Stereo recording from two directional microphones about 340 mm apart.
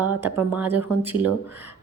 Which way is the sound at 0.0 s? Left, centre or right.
Centre.